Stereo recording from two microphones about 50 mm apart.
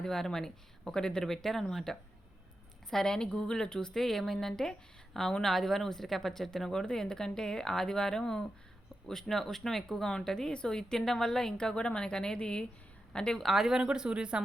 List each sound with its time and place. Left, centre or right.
0.0 s speech: centre
13.4 s speech: centre
13.7 s speech: centre